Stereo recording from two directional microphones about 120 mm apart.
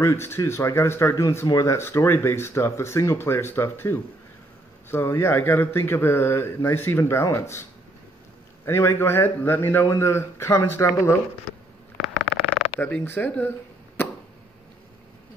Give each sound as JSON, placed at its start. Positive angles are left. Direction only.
{"t": 0.0, "sound": "speech", "side_deg": 20}
{"t": 8.6, "sound": "speech", "side_deg": 20}
{"t": 12.8, "sound": "speech", "side_deg": 15}